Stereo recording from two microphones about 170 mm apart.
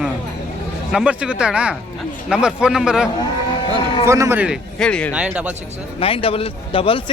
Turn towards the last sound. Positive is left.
turn(degrees=30)  # may be behind; listen again after turning